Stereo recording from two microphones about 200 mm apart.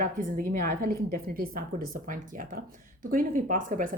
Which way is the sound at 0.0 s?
45° right (ahead or behind).